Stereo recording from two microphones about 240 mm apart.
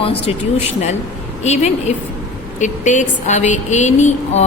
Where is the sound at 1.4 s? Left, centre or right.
Left.